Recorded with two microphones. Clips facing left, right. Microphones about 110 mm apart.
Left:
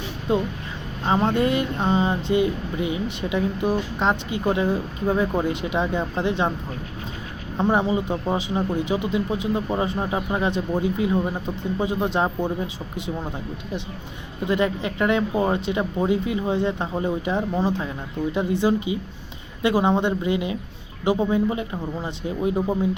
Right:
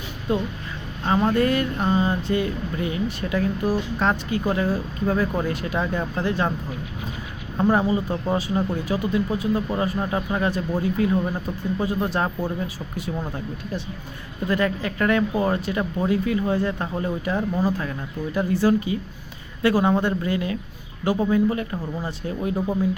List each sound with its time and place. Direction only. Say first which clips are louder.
0.3 s speech: left 2 dB; 25° left (ahead or behind)
7.5 s speech: right 1 dB; 20° left (ahead or behind)
14.4 s speech: left 1 dB; 20° left (ahead or behind)